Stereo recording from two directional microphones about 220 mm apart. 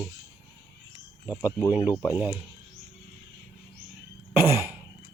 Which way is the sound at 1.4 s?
10° left (ahead or behind).